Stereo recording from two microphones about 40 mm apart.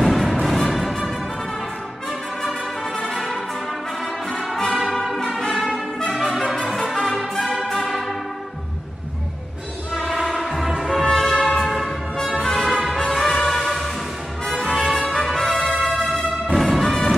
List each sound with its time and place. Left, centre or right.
0.0 s music: centre
3.1 s music: centre
4.0 s brass instrument: centre
6.1 s music: centre
6.4 s music: left
6.7 s music: centre
9.9 s basketball bounce: centre
10.4 s music: centre
12.4 s music: centre
12.6 s music: centre